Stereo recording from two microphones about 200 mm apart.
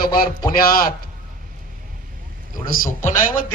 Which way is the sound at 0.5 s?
45° left (ahead or behind).